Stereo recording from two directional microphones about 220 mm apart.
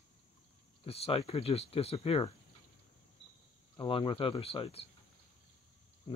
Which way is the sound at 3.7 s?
25° left (ahead or behind).